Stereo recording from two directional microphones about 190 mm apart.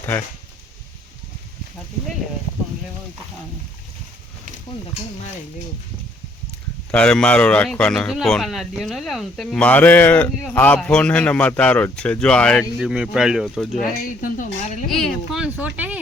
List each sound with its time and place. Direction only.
6.9 s speech: 5° left (ahead or behind)
14.2 s a woman's voice: 45° left (ahead or behind)
14.8 s speech: centre (ahead or behind)